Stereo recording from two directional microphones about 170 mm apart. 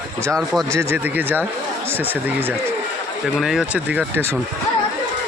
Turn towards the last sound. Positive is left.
turn(degrees=-15)  # may be behind; listen again after turning